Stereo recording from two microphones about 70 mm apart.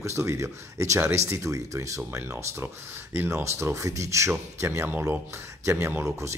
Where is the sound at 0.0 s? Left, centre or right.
Right.